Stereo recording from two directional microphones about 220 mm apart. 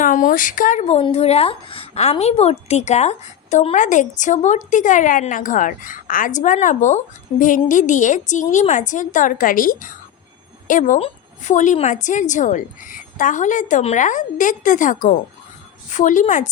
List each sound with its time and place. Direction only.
0.0 s speech: 35° left (ahead or behind)